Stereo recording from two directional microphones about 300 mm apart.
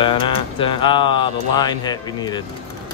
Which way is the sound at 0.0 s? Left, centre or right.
Centre.